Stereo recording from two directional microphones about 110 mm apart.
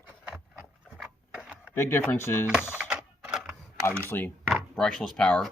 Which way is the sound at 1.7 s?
20° left (ahead or behind).